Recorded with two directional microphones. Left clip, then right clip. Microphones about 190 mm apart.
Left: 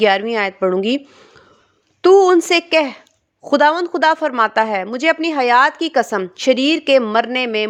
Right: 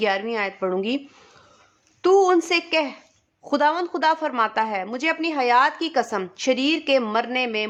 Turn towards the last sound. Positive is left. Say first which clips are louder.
# left 6 dB
turn(degrees=35)  # may be behind; listen again after turning